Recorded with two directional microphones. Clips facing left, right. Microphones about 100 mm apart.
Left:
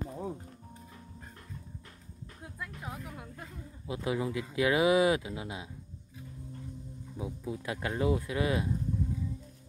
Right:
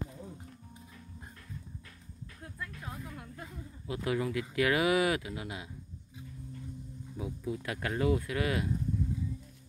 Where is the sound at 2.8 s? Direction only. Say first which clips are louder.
Left 1 dB; 15° left (ahead or behind).